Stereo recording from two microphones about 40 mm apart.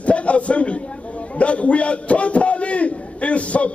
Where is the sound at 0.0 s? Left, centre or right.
Left.